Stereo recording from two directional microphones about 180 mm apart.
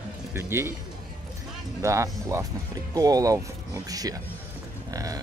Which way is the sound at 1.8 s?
15° right (ahead or behind).